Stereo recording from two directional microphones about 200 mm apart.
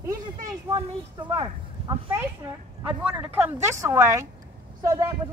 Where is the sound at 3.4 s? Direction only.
10° right (ahead or behind).